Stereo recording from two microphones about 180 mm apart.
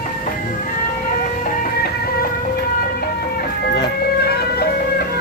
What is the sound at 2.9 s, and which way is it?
Music, 60° left (ahead or behind).